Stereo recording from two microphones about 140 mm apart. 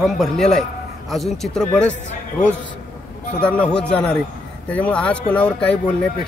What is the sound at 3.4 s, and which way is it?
Speech, 10° left (ahead or behind).